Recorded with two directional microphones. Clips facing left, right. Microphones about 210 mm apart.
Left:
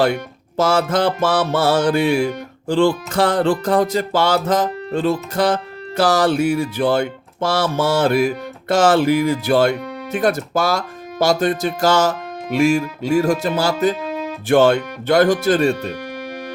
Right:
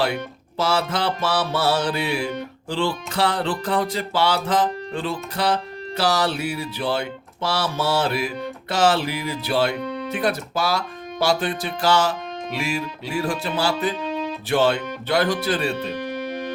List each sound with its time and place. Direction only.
0.0 s speech: 45° left (ahead or behind)
14.0 s music: 10° left (ahead or behind)
14.4 s speech: 50° left (ahead or behind)